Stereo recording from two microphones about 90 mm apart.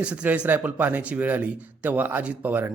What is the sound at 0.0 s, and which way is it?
Speech, 15° right (ahead or behind).